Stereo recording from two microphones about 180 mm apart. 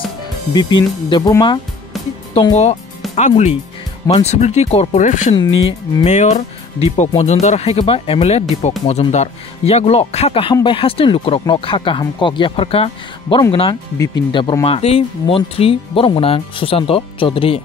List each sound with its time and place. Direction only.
0.5 s speech: 25° left (ahead or behind)
2.5 s speech: 40° left (ahead or behind)